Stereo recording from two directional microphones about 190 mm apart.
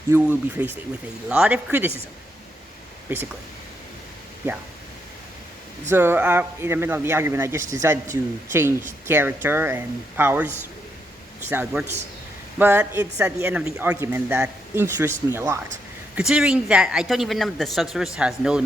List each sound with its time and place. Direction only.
0.1 s speech: 10° right (ahead or behind)
5.9 s speech: 10° right (ahead or behind)